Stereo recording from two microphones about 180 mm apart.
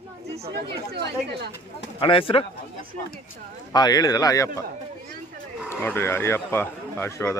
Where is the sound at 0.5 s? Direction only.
70° right (ahead or behind).